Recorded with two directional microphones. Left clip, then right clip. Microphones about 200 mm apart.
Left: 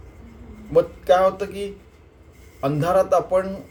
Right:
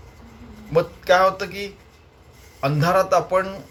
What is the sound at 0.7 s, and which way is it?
A man's voice, 10° left (ahead or behind).